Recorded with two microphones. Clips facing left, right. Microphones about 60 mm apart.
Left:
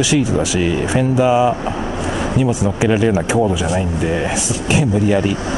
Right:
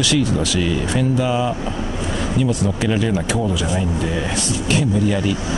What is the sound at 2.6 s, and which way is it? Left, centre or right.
Speech, centre.